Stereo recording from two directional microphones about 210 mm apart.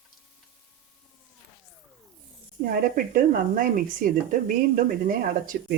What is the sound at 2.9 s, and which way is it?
Speech, 40° right (ahead or behind).